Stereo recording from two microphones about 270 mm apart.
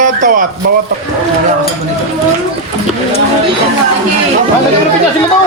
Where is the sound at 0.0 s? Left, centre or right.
Right.